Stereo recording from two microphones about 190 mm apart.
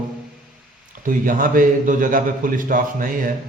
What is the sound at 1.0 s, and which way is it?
A man's voice, 45° right (ahead or behind).